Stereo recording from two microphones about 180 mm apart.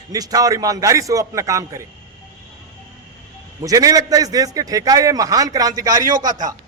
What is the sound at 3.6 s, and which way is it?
A man's voice, 20° right (ahead or behind).